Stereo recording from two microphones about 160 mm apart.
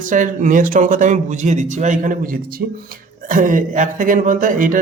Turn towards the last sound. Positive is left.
turn(degrees=-55)  # may be behind; listen again after turning